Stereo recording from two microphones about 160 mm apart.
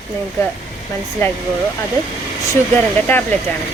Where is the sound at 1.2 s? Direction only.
15° left (ahead or behind).